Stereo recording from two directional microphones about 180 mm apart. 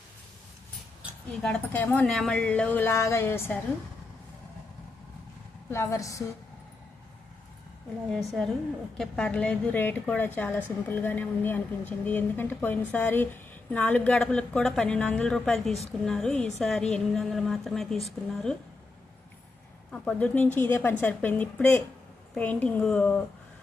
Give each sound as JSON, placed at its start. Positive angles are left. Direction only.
{"t": 1.4, "sound": "a woman's voice", "side_deg": 5}
{"t": 5.7, "sound": "a woman's voice", "side_deg": 15}
{"t": 8.1, "sound": "a woman's voice", "side_deg": 0}
{"t": 19.9, "sound": "a woman's voice", "side_deg": 5}